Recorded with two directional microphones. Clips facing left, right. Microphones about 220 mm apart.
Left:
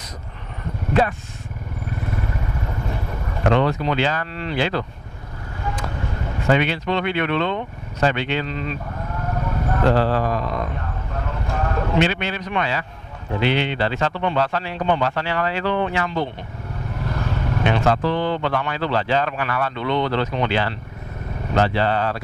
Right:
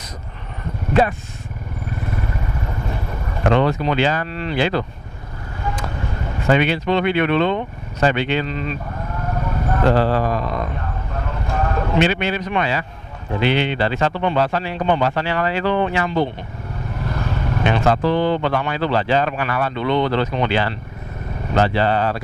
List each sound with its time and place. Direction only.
3.4 s speech: 10° right (ahead or behind)
6.4 s speech: 10° right (ahead or behind)
9.5 s vehicle: 20° right (ahead or behind)
12.0 s speech: 10° right (ahead or behind)